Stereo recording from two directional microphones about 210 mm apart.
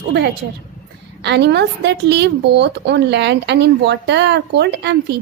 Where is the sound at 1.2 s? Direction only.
55° right (ahead or behind).